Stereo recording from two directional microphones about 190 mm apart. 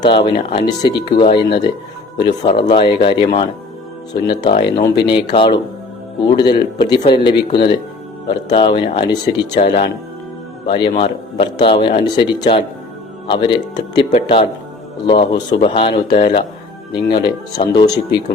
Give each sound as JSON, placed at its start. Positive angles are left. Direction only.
{"t": 0.0, "sound": "a man's voice", "side_deg": 25}
{"t": 10.7, "sound": "a man's voice", "side_deg": 25}